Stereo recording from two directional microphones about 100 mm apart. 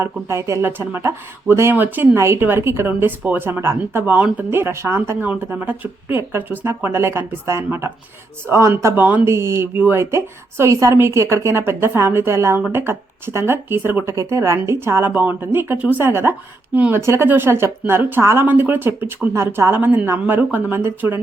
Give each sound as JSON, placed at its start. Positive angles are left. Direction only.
{"t": 0.0, "sound": "speech", "side_deg": -25}